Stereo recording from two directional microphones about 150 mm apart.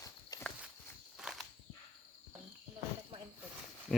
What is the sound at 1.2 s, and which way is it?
Walk, 5° right (ahead or behind).